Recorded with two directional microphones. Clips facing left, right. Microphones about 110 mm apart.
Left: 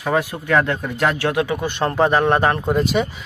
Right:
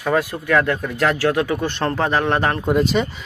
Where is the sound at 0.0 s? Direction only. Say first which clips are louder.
Right 1 dB; 15° left (ahead or behind).